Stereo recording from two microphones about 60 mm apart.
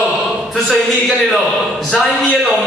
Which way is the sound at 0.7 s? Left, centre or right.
Centre.